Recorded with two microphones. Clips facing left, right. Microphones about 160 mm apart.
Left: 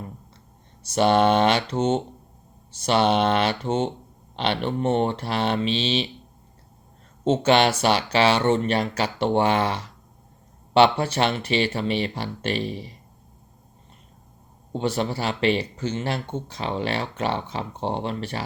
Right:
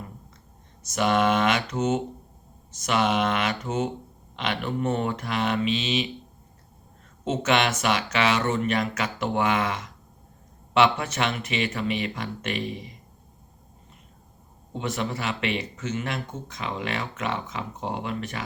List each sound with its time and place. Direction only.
0.8 s speech: 30° left (ahead or behind)
7.3 s speech: 30° left (ahead or behind)
14.7 s speech: 30° left (ahead or behind)